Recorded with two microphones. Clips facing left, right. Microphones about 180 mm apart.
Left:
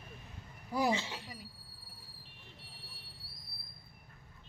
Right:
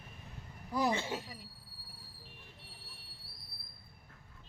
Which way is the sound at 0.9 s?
50° right (ahead or behind).